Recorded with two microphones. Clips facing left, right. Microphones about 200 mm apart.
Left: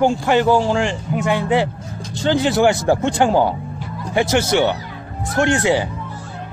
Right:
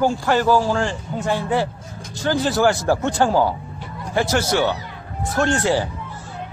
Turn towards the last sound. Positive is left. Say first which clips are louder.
# left 2 dB
turn(degrees=15)  # may be behind; listen again after turning